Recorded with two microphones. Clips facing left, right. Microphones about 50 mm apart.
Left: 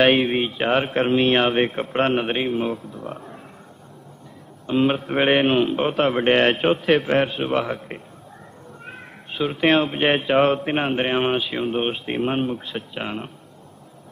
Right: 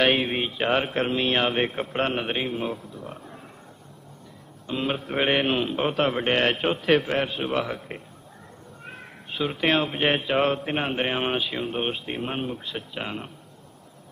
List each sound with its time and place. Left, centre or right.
0.1 s speech: centre
1.5 s speech: centre
4.7 s speech: centre
6.2 s a man's voice: centre
6.6 s a man's voice: centre